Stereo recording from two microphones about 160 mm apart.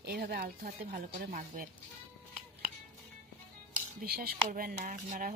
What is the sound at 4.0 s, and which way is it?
Speech, 70° right (ahead or behind).